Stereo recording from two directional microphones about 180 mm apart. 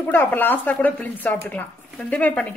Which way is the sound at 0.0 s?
10° left (ahead or behind).